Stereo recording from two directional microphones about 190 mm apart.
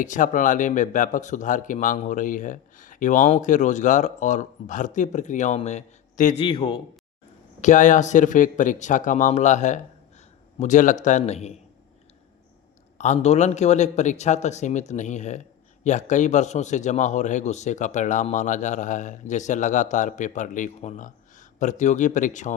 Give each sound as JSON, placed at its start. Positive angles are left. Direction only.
{"t": 0.0, "sound": "a man's voice", "side_deg": 40}
{"t": 6.4, "sound": "speech", "side_deg": 25}
{"t": 7.6, "sound": "a man's voice", "side_deg": 40}
{"t": 13.0, "sound": "a man's voice", "side_deg": 35}